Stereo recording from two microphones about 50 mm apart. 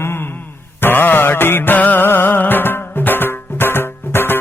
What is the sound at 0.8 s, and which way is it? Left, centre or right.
Music, left.